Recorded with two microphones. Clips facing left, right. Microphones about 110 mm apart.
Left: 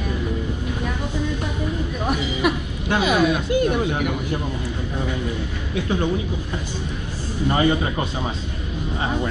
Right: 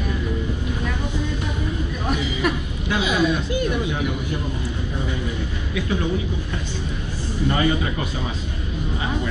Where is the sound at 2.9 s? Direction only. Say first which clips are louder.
Left 2 dB; 50° left (ahead or behind).